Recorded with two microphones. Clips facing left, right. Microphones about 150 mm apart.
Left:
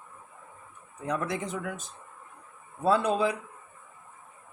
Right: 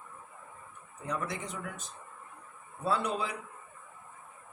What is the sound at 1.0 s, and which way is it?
Speech, 90° left.